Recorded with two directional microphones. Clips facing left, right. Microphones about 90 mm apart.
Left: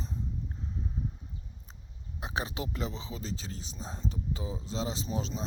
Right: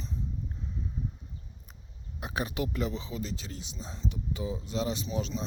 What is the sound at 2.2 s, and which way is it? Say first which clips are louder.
Speech: right 2 dB; 30° left (ahead or behind).